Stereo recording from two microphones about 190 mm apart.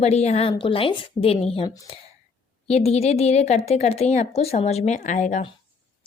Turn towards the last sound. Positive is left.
turn(degrees=40)  # may be behind; listen again after turning